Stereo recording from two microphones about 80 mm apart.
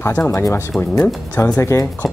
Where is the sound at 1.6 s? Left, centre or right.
Left.